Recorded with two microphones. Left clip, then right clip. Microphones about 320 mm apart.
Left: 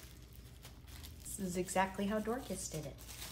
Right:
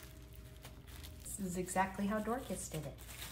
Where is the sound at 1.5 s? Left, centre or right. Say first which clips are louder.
Left 1 dB; centre.